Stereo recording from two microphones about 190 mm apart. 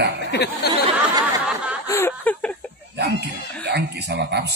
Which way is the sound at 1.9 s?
10° left (ahead or behind).